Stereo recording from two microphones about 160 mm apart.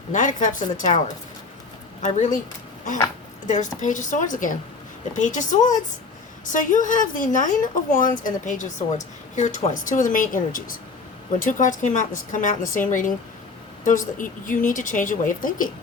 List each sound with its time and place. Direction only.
0.1 s a woman's voice: 50° left (ahead or behind)
3.4 s a woman's voice: 50° left (ahead or behind)